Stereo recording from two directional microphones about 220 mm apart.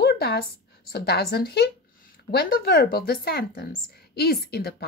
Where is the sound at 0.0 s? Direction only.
45° left (ahead or behind).